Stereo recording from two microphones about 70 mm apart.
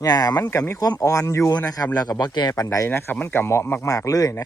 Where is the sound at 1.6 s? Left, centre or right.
Left.